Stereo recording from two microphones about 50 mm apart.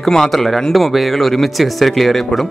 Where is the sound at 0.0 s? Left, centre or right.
Centre.